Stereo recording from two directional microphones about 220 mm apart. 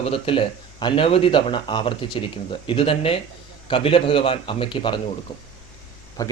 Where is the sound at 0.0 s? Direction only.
25° left (ahead or behind).